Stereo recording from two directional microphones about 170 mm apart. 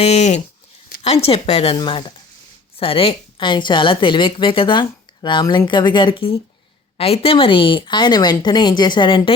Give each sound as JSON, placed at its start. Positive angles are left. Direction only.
{"t": 0.0, "sound": "a woman's voice", "side_deg": 40}